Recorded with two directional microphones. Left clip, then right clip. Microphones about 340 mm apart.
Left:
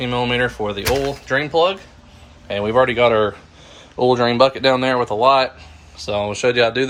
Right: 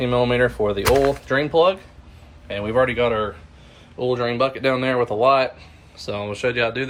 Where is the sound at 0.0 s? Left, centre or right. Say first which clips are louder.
Right 1 dB; centre.